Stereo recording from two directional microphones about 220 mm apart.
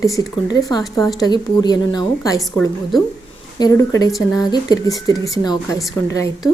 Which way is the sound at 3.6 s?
15° left (ahead or behind).